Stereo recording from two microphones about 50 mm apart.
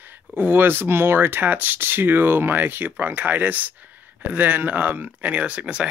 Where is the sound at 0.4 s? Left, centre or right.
Right.